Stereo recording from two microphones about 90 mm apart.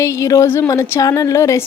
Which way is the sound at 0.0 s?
35° left (ahead or behind).